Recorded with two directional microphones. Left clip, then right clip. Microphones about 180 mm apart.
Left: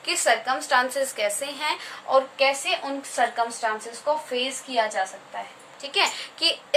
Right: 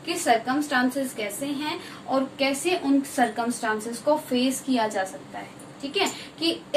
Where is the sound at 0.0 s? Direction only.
50° left (ahead or behind).